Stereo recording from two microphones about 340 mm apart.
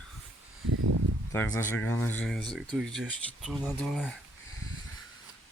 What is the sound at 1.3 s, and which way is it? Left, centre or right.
Speech, centre.